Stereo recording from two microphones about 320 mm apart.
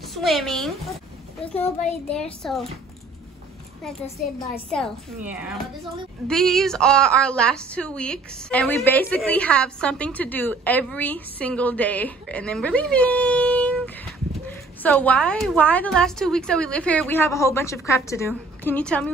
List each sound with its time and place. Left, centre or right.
0.1 s a woman's voice: centre
2.0 s a woman's voice: centre
4.6 s a woman's voice: centre